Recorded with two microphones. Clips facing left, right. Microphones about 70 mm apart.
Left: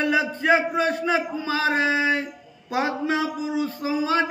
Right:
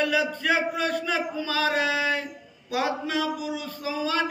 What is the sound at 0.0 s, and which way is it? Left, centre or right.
Speech, left.